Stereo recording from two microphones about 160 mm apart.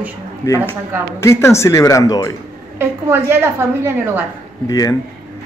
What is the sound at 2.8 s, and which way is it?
Speech, 15° right (ahead or behind).